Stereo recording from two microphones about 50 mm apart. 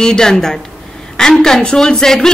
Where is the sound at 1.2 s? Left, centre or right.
Centre.